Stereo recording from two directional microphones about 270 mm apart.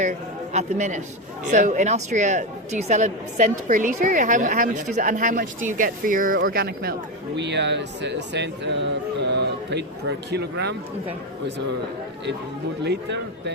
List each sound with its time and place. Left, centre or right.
0.0 s a man's voice: right
12.8 s speech: right